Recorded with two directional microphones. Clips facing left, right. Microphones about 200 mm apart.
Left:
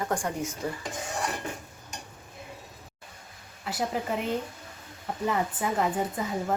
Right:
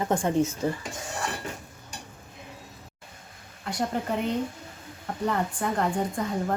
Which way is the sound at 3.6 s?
5° left (ahead or behind).